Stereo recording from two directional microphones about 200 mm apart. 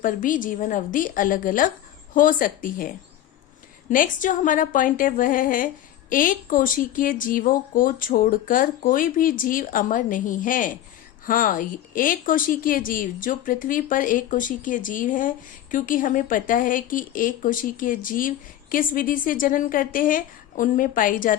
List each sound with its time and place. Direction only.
0.0 s a woman's voice: 40° left (ahead or behind)